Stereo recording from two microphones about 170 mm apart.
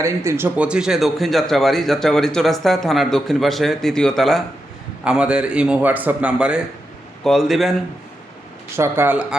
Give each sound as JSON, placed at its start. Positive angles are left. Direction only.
{"t": 0.0, "sound": "a man's voice", "side_deg": -15}
{"t": 8.7, "sound": "speech", "side_deg": -15}